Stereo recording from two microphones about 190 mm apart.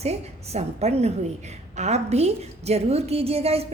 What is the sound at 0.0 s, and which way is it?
A woman's voice, 35° right (ahead or behind).